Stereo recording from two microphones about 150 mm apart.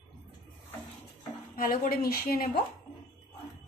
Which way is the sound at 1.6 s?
75° left (ahead or behind).